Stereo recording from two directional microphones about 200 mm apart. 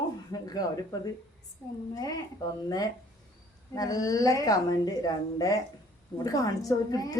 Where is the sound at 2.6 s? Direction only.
20° left (ahead or behind).